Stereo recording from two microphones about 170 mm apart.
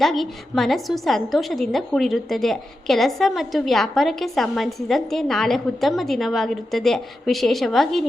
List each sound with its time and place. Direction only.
0.0 s a woman's voice: centre (ahead or behind)